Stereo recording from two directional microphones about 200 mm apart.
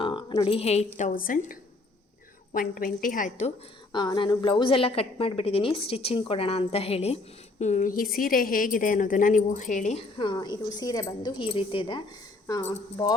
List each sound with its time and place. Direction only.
0.0 s a sound: 25° left (ahead or behind)
0.9 s a woman's voice: 40° left (ahead or behind)
3.9 s a woman's voice: 20° left (ahead or behind); by 10.0 s 35° left (ahead or behind)
10.2 s a woman's voice: 20° left (ahead or behind)